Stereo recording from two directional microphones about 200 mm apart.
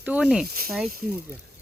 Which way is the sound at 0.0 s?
5° right (ahead or behind).